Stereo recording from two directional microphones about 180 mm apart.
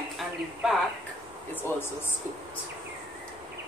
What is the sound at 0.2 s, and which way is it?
Speech, centre (ahead or behind).